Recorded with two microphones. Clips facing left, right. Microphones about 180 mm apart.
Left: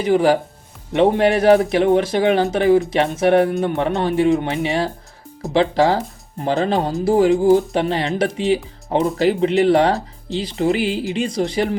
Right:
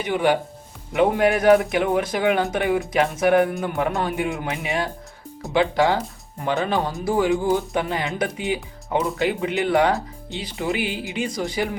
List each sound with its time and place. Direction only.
0.0 s speech: 35° left (ahead or behind)